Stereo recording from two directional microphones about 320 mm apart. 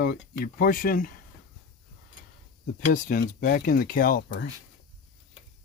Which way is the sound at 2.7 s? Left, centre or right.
Left.